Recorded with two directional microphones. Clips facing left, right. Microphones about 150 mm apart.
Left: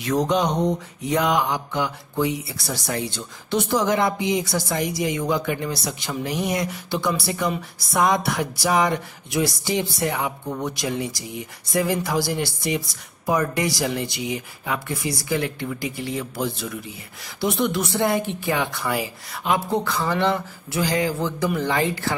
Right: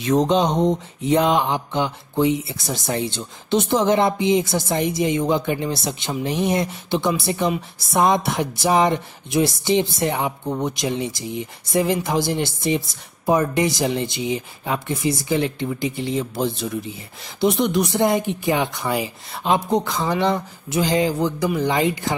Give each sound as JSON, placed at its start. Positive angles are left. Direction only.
{"t": 0.0, "sound": "mantra", "side_deg": -25}